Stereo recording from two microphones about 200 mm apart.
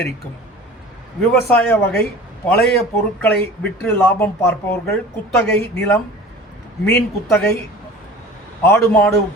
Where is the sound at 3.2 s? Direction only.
10° left (ahead or behind).